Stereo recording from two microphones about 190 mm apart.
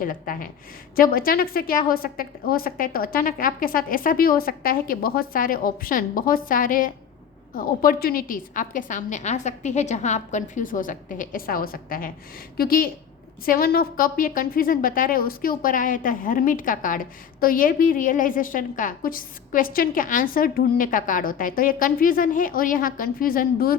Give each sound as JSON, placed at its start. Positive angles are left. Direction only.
{"t": 0.0, "sound": "a woman's voice", "side_deg": 45}